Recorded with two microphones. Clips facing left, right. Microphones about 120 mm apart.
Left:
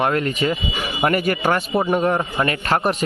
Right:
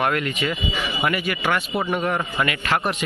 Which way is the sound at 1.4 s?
30° left (ahead or behind).